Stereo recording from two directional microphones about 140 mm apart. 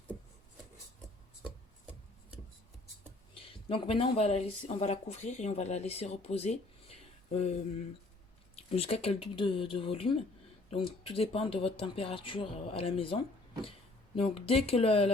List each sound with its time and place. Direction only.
3.3 s speech: 40° left (ahead or behind)
8.5 s speech: 45° left (ahead or behind)